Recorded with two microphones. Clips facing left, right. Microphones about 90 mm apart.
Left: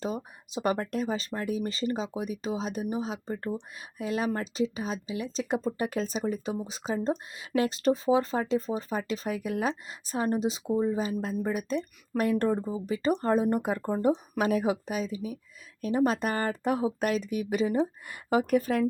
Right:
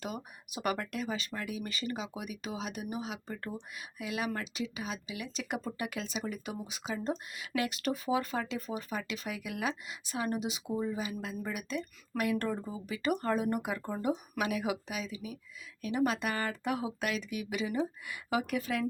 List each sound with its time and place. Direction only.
0.0 s speech: 30° left (ahead or behind)